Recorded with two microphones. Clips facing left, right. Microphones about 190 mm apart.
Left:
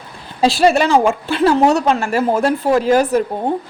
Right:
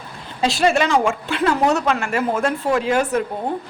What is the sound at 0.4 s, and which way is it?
A woman's voice, 35° left (ahead or behind).